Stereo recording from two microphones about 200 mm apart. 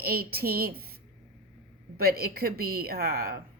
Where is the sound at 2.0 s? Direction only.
50° right (ahead or behind).